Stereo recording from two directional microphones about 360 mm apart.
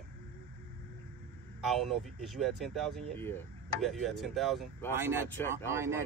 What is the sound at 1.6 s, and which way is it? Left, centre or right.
Speech, centre.